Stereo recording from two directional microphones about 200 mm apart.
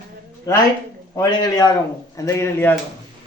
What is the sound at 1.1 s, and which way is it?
A man's voice, 20° left (ahead or behind).